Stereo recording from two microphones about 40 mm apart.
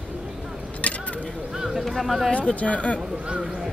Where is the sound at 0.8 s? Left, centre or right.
Left.